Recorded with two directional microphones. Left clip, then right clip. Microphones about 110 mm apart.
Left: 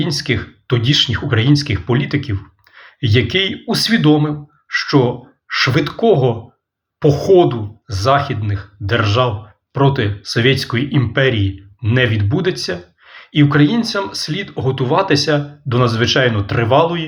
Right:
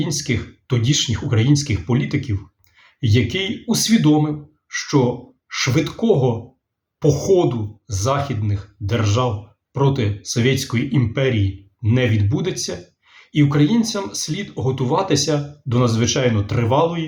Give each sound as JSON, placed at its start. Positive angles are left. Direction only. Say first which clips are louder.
{"t": 0.0, "sound": "speech", "louder": "left 4 dB", "side_deg": -15}